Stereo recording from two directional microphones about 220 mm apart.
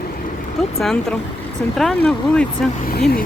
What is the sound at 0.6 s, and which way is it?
Speech, centre (ahead or behind).